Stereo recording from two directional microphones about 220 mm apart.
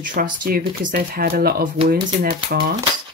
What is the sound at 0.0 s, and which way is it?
Speech, 40° right (ahead or behind).